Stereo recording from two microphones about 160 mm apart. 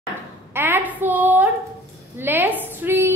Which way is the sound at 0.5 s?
15° right (ahead or behind).